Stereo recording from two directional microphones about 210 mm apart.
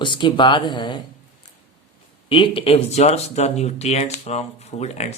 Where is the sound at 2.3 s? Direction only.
25° left (ahead or behind).